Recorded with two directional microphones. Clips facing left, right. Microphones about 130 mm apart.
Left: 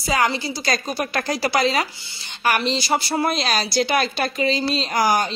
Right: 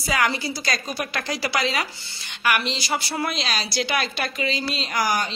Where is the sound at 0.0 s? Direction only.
30° left (ahead or behind).